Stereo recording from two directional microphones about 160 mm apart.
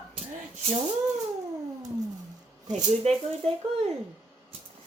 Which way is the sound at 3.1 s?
40° right (ahead or behind).